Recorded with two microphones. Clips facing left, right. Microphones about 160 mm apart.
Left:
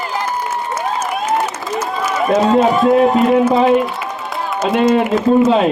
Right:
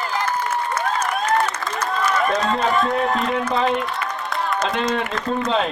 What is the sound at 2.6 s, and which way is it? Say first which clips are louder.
Speech: left 8 dB; 5° left (ahead or behind).